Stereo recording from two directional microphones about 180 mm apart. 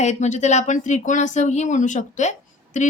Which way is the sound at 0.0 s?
40° left (ahead or behind).